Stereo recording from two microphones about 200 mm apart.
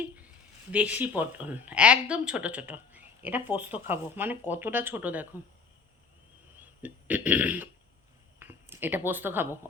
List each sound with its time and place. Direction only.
0.7 s speech: 10° right (ahead or behind)
6.6 s throat clearing: 5° right (ahead or behind)
8.4 s speech: 10° right (ahead or behind)